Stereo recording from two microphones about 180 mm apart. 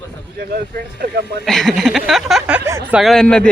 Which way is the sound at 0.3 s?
65° right (ahead or behind).